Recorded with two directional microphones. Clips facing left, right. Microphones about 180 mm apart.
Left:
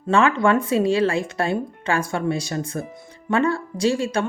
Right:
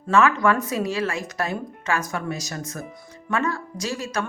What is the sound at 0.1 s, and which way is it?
Speech, 30° left (ahead or behind).